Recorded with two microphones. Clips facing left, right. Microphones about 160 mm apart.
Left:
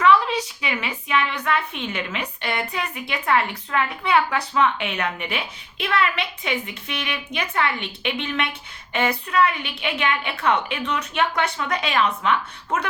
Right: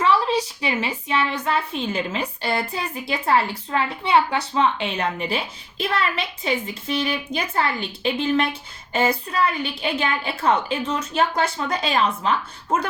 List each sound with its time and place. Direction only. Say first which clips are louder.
0.0 s a woman's voice: left 1 dB; 30° right (ahead or behind)